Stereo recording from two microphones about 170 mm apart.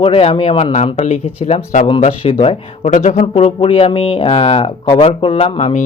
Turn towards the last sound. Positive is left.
turn(degrees=40)  # may be behind; listen again after turning